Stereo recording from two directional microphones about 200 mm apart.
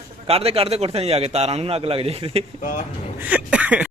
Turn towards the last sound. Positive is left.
turn(degrees=-5)  # may be behind; listen again after turning